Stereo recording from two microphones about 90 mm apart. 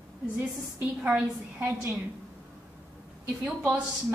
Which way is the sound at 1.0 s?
10° right (ahead or behind).